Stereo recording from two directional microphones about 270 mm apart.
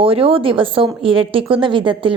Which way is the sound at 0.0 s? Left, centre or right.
Centre.